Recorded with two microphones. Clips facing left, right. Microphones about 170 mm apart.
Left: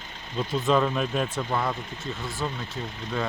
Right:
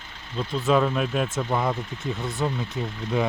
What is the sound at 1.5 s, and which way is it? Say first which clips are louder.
Speech: right 3 dB; 15° right (ahead or behind).